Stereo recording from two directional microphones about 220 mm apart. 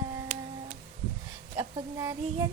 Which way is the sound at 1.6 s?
15° right (ahead or behind).